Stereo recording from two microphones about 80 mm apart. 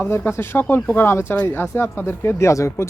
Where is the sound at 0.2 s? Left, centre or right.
Left.